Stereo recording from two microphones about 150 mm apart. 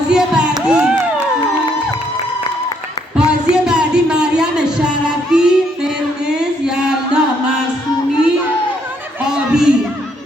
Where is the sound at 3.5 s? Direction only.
5° right (ahead or behind).